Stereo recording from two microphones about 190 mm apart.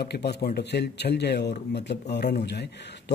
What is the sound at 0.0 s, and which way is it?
A man's voice, 60° left (ahead or behind).